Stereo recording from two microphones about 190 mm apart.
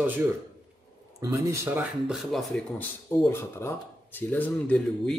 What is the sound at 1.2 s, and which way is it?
Speech, 15° right (ahead or behind).